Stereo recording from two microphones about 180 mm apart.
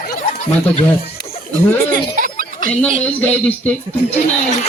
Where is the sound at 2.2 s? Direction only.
50° right (ahead or behind).